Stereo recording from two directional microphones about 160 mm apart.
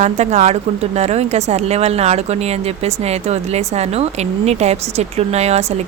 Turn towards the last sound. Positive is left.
turn(degrees=-45)  # may be behind; listen again after turning